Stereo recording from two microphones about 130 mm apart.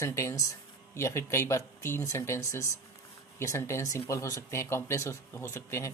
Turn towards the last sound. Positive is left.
turn(degrees=20)  # may be behind; listen again after turning